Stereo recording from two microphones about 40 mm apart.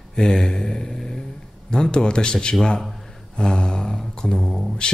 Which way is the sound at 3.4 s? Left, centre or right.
Left.